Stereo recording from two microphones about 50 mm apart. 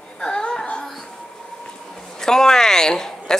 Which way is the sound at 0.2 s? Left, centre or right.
Centre.